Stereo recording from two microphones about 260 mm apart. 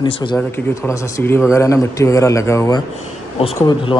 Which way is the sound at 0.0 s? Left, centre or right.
Centre.